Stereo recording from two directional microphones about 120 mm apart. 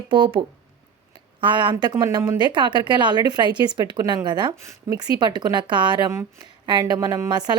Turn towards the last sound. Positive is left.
turn(degrees=-35)  # may be behind; listen again after turning